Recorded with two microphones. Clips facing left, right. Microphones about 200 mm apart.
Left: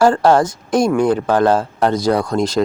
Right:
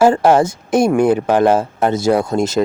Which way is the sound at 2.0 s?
25° right (ahead or behind).